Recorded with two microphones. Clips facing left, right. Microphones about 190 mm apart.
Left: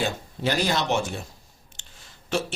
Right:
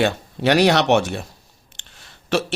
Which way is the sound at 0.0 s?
70° right (ahead or behind).